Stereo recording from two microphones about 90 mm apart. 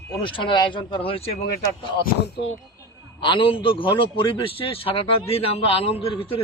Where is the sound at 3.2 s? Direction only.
70° left (ahead or behind).